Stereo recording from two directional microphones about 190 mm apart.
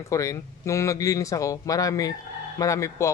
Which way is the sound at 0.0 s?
15° left (ahead or behind).